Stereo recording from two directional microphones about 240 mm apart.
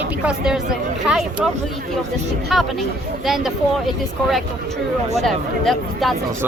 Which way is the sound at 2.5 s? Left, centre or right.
Centre.